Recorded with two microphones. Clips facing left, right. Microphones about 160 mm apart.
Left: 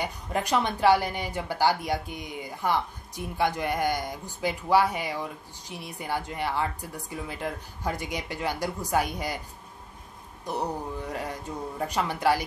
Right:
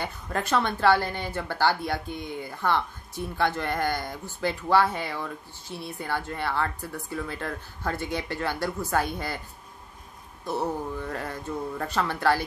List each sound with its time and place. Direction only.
0.0 s speech: 15° left (ahead or behind)
10.4 s speech: 15° left (ahead or behind)